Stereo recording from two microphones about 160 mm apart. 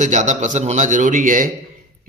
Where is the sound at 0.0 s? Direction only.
50° right (ahead or behind).